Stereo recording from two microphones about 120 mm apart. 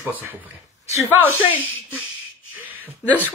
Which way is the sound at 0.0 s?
15° right (ahead or behind).